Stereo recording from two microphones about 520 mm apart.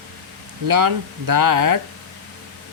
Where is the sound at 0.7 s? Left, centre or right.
Right.